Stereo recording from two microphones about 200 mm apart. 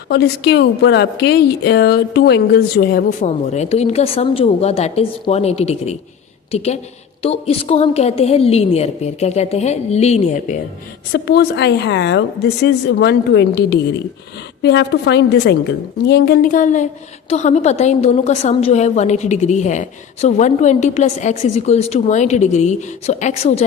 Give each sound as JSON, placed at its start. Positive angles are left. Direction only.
{"t": 0.1, "sound": "a woman's voice", "side_deg": 55}
{"t": 11.1, "sound": "a woman's voice", "side_deg": 55}